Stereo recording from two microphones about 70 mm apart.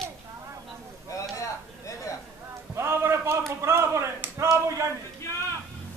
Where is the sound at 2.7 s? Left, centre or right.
Right.